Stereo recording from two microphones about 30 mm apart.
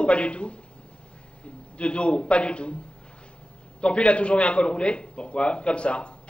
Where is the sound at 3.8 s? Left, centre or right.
Left.